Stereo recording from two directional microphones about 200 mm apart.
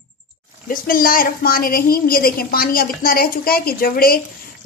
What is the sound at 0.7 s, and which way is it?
A woman's voice, 45° left (ahead or behind).